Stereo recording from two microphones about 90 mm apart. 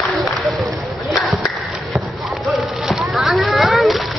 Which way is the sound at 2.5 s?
Centre (ahead or behind).